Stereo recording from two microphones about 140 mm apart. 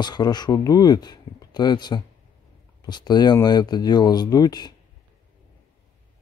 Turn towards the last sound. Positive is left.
turn(degrees=30)  # may be behind; listen again after turning